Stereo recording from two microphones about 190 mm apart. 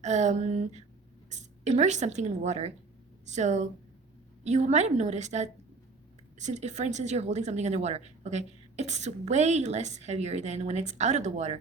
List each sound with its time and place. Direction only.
0.0 s a woman's voice: 40° right (ahead or behind)